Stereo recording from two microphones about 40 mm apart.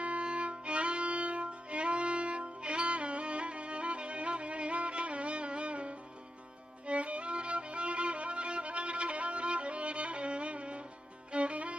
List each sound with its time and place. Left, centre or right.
0.0 s music: right
6.8 s violin: right
11.3 s music: right